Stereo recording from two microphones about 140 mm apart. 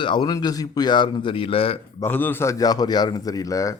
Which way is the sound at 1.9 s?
15° left (ahead or behind).